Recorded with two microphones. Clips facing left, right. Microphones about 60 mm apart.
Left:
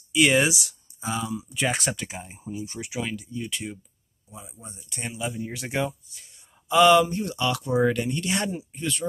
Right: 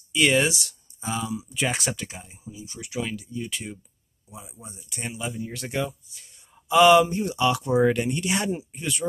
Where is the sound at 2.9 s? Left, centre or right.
Centre.